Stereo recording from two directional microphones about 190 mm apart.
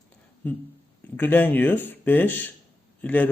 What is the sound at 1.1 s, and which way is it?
A man's voice, 10° left (ahead or behind).